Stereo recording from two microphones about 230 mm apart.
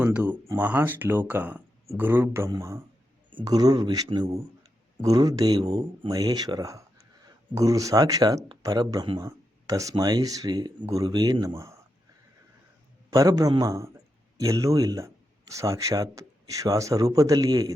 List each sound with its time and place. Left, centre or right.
0.0 s speech: centre
13.1 s speech: centre